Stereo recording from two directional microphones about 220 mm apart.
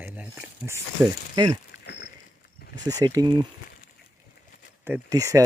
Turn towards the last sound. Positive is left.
turn(degrees=-15)  # may be behind; listen again after turning